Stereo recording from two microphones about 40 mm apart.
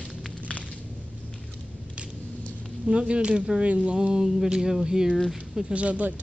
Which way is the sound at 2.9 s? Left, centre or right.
Right.